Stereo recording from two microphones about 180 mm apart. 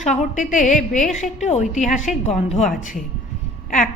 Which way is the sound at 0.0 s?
40° left (ahead or behind).